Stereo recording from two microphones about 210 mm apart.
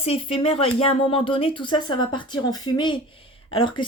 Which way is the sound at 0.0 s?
25° left (ahead or behind).